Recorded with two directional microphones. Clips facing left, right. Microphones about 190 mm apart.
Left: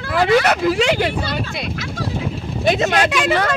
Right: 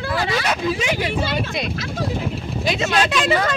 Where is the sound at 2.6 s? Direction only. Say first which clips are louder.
Left 6 dB; 50° left (ahead or behind).